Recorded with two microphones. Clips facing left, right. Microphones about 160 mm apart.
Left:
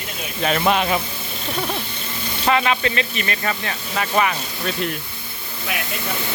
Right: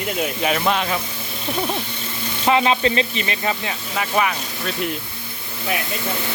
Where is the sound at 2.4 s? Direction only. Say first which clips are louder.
Right 2 dB; 20° right (ahead or behind).